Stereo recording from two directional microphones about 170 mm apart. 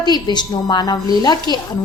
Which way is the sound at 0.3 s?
25° left (ahead or behind).